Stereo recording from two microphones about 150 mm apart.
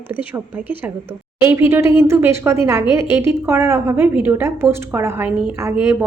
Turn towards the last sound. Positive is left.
turn(degrees=-15)  # may be behind; listen again after turning